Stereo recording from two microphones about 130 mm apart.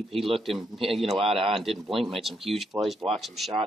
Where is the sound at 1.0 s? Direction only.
50° right (ahead or behind).